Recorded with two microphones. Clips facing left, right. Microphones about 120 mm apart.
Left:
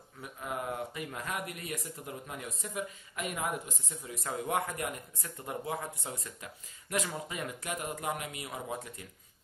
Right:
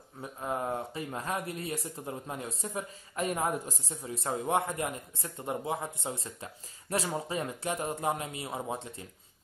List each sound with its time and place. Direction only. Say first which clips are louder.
0.2 s speech: right 4 dB; 30° right (ahead or behind)